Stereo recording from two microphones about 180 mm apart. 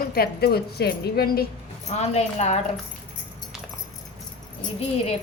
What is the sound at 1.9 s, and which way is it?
Speech, 40° left (ahead or behind).